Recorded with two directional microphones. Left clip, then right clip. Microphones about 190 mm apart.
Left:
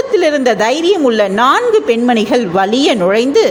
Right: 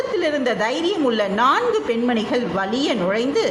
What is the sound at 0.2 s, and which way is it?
A woman's voice, 35° left (ahead or behind).